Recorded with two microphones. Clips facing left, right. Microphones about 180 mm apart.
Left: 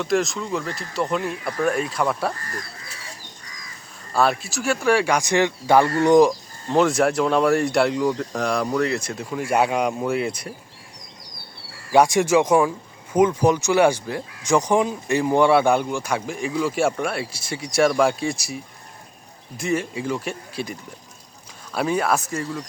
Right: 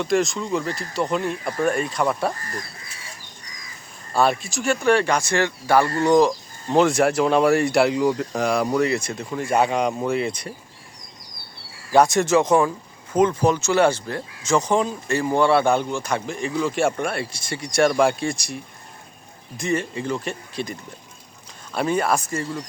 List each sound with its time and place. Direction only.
0.0 s speech: centre (ahead or behind)
4.1 s speech: centre (ahead or behind); by 6.3 s 15° left (ahead or behind)
6.7 s speech: centre (ahead or behind)
11.9 s speech: 10° left (ahead or behind)